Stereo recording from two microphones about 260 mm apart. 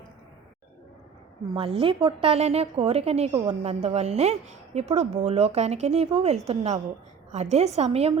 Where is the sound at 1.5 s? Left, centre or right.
Right.